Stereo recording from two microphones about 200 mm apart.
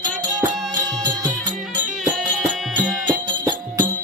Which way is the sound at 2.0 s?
5° right (ahead or behind).